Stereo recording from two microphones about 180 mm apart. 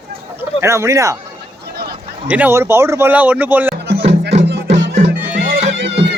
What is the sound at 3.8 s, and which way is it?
Music, 65° right (ahead or behind).